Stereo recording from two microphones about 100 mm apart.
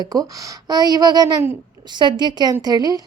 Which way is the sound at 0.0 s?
40° right (ahead or behind).